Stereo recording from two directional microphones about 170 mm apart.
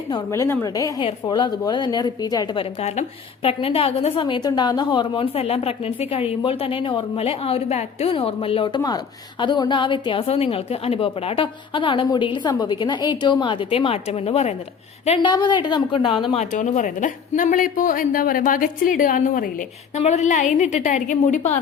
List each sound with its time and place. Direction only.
0.1 s a woman's voice: 15° left (ahead or behind); by 15.3 s 35° left (ahead or behind)
15.3 s a woman's voice: 25° left (ahead or behind); by 21.6 s 45° left (ahead or behind)